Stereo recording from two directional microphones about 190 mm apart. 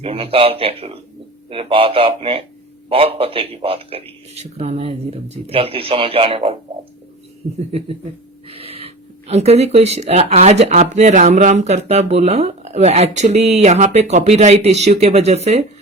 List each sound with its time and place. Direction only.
0.0 s speech: 30° right (ahead or behind)
8.4 s speech: 30° right (ahead or behind)